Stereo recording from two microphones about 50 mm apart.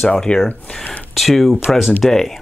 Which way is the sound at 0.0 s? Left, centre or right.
Centre.